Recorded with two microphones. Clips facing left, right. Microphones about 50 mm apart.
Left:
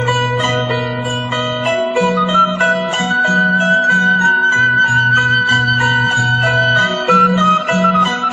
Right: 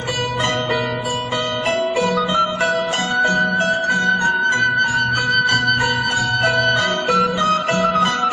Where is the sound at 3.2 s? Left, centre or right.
Centre.